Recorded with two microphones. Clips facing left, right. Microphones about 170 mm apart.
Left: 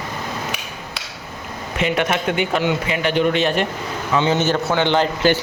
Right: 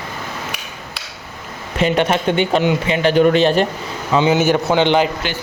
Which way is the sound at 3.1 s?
40° right (ahead or behind).